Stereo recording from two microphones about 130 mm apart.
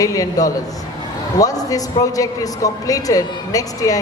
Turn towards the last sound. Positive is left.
turn(degrees=25)  # may be behind; listen again after turning